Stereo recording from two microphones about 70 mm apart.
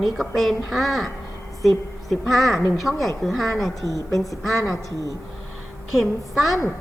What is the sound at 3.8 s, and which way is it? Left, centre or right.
A woman's voice, left.